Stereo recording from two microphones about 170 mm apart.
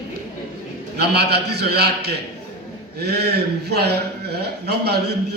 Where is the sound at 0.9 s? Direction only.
75° right (ahead or behind).